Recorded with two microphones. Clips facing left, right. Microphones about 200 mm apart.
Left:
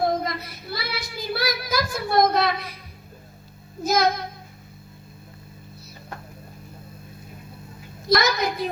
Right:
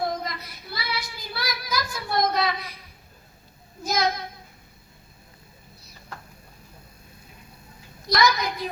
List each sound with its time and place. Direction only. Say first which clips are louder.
0.0 s child singing: left 5 dB; 55° left (ahead or behind)
3.8 s child singing: left 4 dB; 55° left (ahead or behind)
8.1 s a sound: left 2 dB; 55° left (ahead or behind)